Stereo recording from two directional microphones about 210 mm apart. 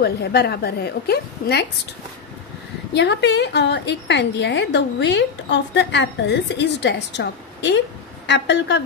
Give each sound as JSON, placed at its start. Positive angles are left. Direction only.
{"t": 0.0, "sound": "a woman's voice", "side_deg": 50}
{"t": 2.9, "sound": "a woman's voice", "side_deg": 55}